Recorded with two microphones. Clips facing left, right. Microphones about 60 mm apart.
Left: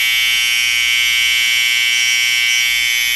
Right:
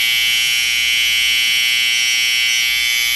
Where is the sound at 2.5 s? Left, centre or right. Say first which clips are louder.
Left 2 dB; left.